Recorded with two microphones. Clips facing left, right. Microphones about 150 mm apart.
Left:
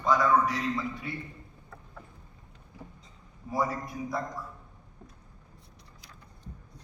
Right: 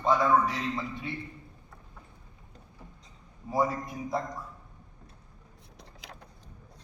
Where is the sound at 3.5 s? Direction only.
25° right (ahead or behind).